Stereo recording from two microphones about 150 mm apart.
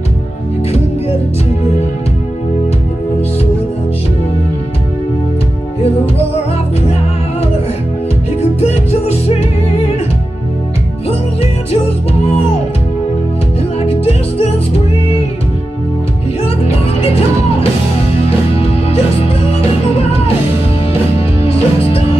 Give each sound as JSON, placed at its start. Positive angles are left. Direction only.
{"t": 8.4, "sound": "music", "side_deg": 45}
{"t": 11.7, "sound": "music", "side_deg": 45}
{"t": 13.7, "sound": "music", "side_deg": 40}
{"t": 16.4, "sound": "music", "side_deg": 40}
{"t": 18.6, "sound": "music", "side_deg": 40}
{"t": 21.4, "sound": "music", "side_deg": 40}